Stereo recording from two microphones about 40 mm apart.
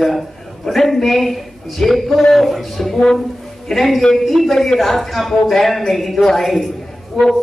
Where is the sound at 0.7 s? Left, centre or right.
Centre.